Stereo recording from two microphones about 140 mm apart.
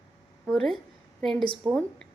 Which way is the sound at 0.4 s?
5° left (ahead or behind).